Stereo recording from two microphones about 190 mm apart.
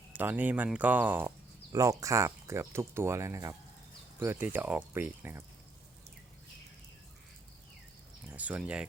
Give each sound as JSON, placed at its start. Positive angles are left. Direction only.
{"t": 0.1, "sound": "speech", "side_deg": -10}
{"t": 8.3, "sound": "speech", "side_deg": -10}